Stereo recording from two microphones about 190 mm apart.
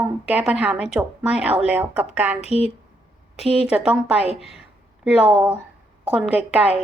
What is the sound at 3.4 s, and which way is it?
A woman's voice, 5° right (ahead or behind).